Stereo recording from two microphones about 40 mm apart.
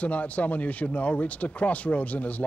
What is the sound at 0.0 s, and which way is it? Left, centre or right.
A man's voice, left.